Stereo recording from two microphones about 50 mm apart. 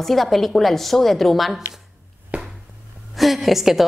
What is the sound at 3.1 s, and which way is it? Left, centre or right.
Speech, centre.